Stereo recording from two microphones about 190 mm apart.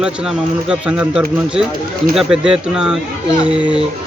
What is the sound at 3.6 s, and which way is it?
Speech, 25° left (ahead or behind).